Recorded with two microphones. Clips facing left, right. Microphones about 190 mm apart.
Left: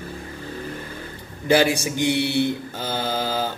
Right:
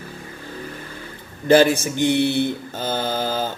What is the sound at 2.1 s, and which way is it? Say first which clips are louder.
Speech: right 2 dB; 55° right (ahead or behind).